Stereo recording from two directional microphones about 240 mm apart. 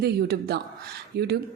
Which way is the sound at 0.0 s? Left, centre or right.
Right.